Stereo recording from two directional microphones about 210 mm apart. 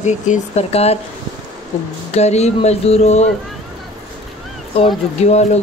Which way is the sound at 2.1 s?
30° left (ahead or behind).